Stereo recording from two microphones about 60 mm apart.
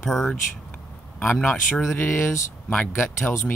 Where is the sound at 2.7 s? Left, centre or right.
Left.